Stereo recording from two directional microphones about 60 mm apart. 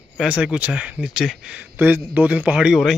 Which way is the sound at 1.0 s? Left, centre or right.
Centre.